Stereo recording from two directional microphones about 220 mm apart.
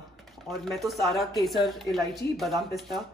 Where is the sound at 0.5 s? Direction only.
Centre (ahead or behind).